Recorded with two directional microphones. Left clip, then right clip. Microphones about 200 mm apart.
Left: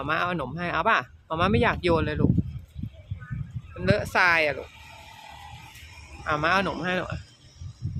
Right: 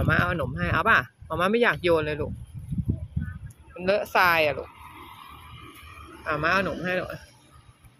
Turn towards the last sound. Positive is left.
turn(degrees=10)  # may be behind; listen again after turning